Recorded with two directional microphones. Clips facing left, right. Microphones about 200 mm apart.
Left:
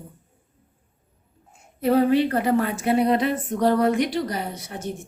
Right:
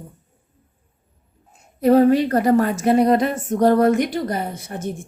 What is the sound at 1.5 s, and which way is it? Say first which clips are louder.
A woman's voice: right 6 dB; 40° right (ahead or behind).